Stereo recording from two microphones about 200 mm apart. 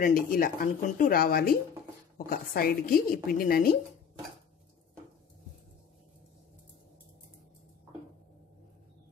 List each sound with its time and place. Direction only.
0.0 s speech: 45° left (ahead or behind)